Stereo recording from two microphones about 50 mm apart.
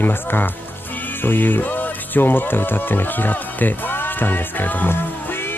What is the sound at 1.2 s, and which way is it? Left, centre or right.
Music, left.